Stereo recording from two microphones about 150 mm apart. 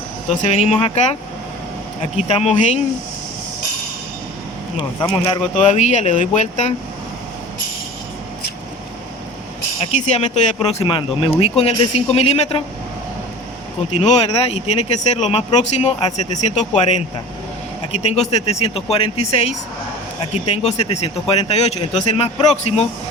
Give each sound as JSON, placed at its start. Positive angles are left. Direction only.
{"t": 0.3, "sound": "speech", "side_deg": 45}
{"t": 2.1, "sound": "speech", "side_deg": 45}
{"t": 4.8, "sound": "speech", "side_deg": 35}
{"t": 5.5, "sound": "speech", "side_deg": 50}
{"t": 9.9, "sound": "speech", "side_deg": 50}
{"t": 10.7, "sound": "speech", "side_deg": 40}
{"t": 14.0, "sound": "speech", "side_deg": 45}
{"t": 17.9, "sound": "speech", "side_deg": 45}